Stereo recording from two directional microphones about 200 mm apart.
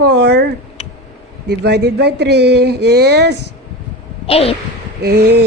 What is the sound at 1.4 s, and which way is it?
Speech, 55° right (ahead or behind).